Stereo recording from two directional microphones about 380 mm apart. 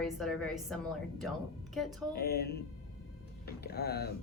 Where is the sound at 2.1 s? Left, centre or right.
Left.